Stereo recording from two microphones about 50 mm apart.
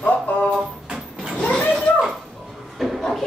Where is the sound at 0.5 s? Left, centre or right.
Centre.